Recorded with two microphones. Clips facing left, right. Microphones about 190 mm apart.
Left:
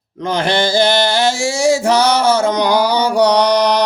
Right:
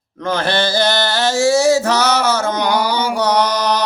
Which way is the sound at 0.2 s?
15° left (ahead or behind).